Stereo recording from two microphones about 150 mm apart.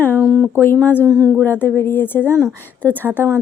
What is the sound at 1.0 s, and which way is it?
Speech, 25° right (ahead or behind).